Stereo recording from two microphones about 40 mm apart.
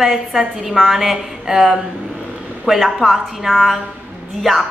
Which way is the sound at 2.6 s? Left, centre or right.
Centre.